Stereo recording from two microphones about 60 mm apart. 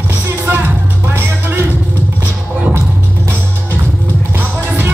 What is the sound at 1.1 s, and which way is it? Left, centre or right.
Music, right.